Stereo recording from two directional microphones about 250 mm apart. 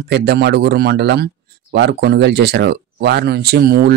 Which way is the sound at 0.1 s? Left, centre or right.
Right.